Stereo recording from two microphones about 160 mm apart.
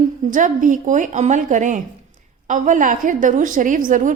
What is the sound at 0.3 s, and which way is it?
A woman's voice, 55° right (ahead or behind).